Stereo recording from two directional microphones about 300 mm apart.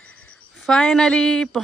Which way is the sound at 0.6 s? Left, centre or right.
Centre.